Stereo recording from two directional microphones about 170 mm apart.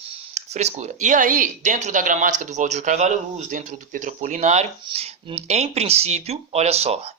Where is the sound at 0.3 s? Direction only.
40° right (ahead or behind).